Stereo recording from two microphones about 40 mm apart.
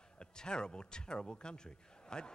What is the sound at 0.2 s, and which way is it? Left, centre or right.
Speech, left.